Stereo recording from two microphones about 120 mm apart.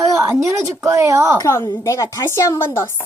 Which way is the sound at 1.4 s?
25° left (ahead or behind).